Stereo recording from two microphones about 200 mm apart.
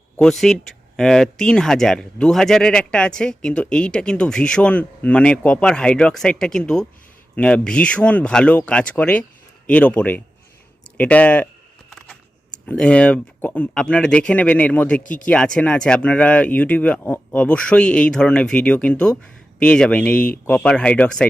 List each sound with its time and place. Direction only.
0.2 s speech: centre (ahead or behind)
11.9 s keys jangling: 5° left (ahead or behind)
12.6 s speech: 5° left (ahead or behind)
15.0 s speech: 40° left (ahead or behind)
15.3 s speech: 5° left (ahead or behind)